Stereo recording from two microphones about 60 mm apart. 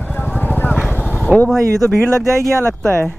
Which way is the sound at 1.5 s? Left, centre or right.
Centre.